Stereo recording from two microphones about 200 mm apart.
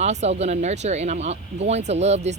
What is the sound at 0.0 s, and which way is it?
Speech, 35° right (ahead or behind).